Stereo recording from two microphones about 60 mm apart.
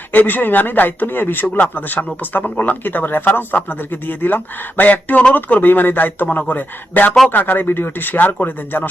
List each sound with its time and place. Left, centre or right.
0.1 s speech: left